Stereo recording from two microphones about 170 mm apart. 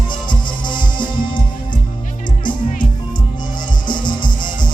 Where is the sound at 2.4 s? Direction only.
50° left (ahead or behind).